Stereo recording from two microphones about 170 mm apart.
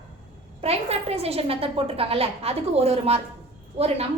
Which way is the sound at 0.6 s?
35° right (ahead or behind).